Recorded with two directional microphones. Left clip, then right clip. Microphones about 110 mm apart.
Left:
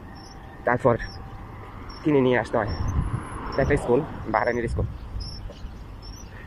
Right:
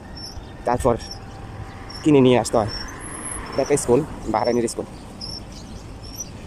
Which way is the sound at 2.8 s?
5° left (ahead or behind).